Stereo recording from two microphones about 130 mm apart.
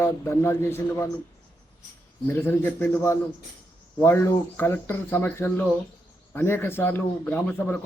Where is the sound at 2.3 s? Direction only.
15° left (ahead or behind).